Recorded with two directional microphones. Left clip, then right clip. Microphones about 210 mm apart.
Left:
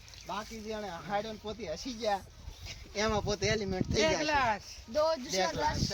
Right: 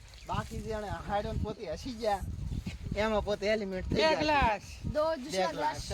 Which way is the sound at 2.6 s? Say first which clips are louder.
Right 1 dB; 40° left (ahead or behind).